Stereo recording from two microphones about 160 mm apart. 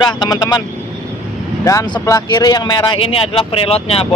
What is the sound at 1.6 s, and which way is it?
Speech, 25° left (ahead or behind).